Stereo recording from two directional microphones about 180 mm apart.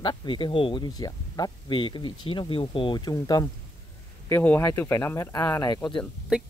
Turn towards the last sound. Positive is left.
turn(degrees=-5)  # may be behind; listen again after turning